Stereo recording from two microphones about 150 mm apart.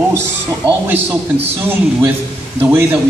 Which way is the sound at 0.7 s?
15° right (ahead or behind).